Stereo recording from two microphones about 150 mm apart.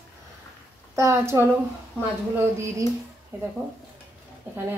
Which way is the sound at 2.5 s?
20° right (ahead or behind).